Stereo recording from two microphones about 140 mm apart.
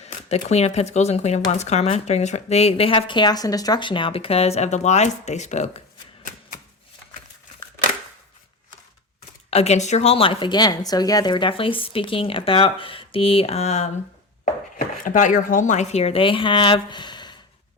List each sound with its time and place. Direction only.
0.0 s speech: 50° left (ahead or behind)
9.5 s a woman's voice: 50° left (ahead or behind)
14.8 s speech: 70° left (ahead or behind); by 17.3 s 30° left (ahead or behind)